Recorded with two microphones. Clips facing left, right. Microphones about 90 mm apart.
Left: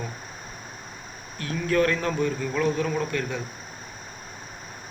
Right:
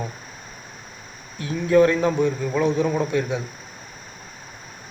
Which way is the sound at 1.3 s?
20° right (ahead or behind).